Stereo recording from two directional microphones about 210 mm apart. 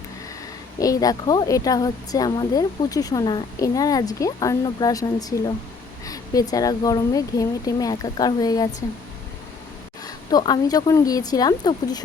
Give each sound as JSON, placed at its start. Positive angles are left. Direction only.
{"t": 0.8, "sound": "a woman's voice", "side_deg": 15}
{"t": 10.0, "sound": "speech", "side_deg": 20}